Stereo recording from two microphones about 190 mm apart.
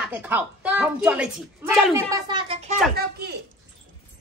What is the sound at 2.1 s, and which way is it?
Speech, 25° right (ahead or behind).